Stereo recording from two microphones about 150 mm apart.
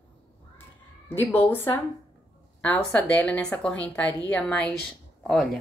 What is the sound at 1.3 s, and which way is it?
A woman's voice, 15° left (ahead or behind).